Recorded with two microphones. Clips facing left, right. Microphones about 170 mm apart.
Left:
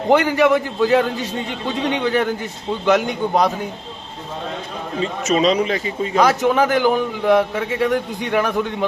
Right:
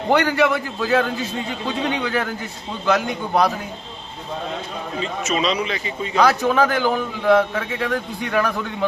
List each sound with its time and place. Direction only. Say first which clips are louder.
0.1 s a man's voice: left 3 dB; 20° left (ahead or behind)
5.2 s speech: left 6 dB; 45° left (ahead or behind)
6.1 s a man's voice: left 1 dB; 20° left (ahead or behind)